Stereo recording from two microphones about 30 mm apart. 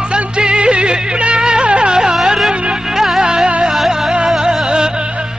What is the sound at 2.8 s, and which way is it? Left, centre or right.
Music, centre.